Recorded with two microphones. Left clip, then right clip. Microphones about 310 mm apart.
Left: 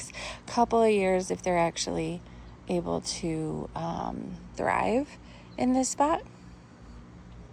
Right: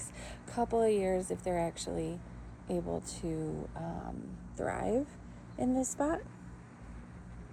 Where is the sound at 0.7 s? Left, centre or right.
Left.